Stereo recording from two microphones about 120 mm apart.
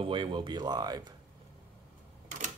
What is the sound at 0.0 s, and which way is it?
Speech, 40° right (ahead or behind).